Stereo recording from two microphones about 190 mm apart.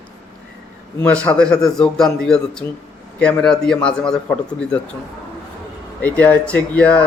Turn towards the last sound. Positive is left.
turn(degrees=5)  # may be behind; listen again after turning